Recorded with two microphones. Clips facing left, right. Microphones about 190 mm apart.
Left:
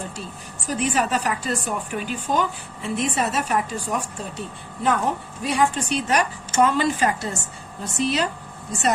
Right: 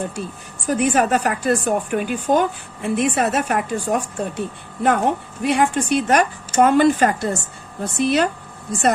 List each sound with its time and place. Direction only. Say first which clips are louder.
0.7 s speech: right 5 dB; 55° right (ahead or behind)